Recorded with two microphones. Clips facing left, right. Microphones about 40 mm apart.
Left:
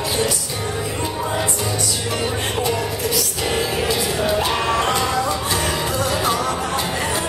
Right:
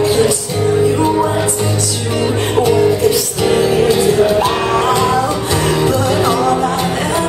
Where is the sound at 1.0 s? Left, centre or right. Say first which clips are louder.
Right 11 dB; right.